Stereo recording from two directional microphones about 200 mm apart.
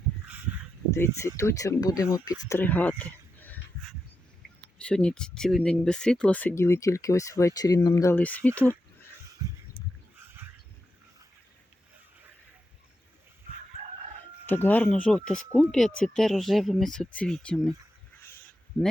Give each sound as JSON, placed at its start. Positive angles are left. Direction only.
{"t": 0.9, "sound": "speech", "side_deg": 15}
{"t": 4.8, "sound": "speech", "side_deg": 5}
{"t": 9.4, "sound": "a sound", "side_deg": -15}
{"t": 14.4, "sound": "speech", "side_deg": 10}